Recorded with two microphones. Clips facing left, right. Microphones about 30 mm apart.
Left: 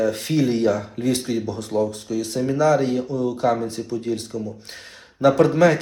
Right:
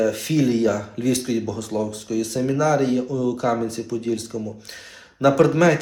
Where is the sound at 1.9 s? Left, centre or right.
Left.